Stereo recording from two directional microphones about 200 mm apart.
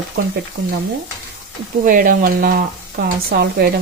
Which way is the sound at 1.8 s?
45° right (ahead or behind).